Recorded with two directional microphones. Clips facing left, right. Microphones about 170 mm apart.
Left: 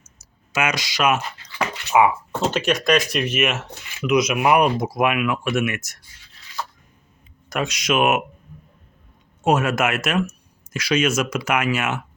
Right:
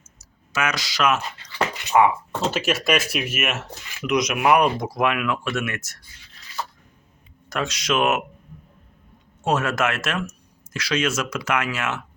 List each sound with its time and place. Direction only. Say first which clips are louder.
0.5 s speech: left 2 dB; 15° left (ahead or behind)
2.5 s speech: left 3 dB; 5° right (ahead or behind); by 6.0 s 15° left (ahead or behind)
7.5 s speech: left 2 dB; 15° left (ahead or behind)
9.4 s speech: left 3 dB; 15° left (ahead or behind)